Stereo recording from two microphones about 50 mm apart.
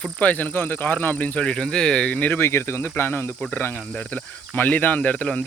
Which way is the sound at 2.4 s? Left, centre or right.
Left.